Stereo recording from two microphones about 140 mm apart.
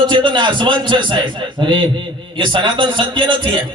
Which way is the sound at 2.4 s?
35° right (ahead or behind).